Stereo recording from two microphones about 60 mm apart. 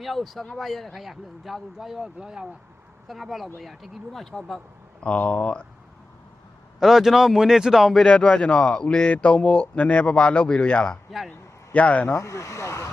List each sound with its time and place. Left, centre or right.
0.0 s speech: centre
3.1 s speech: centre
4.9 s speech: left
6.7 s speech: centre
8.0 s a man's voice: centre
11.3 s a sound: left
12.1 s speech: left